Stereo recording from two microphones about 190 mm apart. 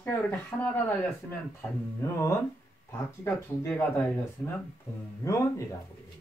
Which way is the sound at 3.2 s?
5° left (ahead or behind).